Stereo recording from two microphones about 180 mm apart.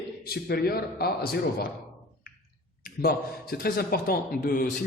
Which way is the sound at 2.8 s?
55° left (ahead or behind).